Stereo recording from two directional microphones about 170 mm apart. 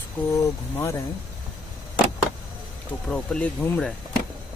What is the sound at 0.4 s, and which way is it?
Speech, 15° left (ahead or behind).